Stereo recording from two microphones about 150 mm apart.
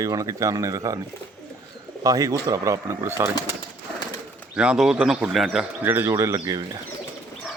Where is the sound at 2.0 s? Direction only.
25° right (ahead or behind).